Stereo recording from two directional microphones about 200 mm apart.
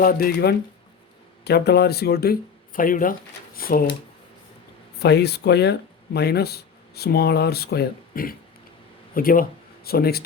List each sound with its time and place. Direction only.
0.0 s speech: 45° left (ahead or behind)
4.9 s speech: 55° left (ahead or behind)